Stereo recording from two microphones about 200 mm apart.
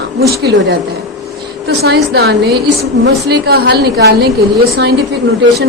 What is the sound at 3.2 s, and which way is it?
A woman's voice, 55° right (ahead or behind).